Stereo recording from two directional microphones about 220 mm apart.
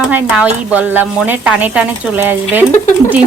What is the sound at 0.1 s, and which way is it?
Speech, 5° right (ahead or behind).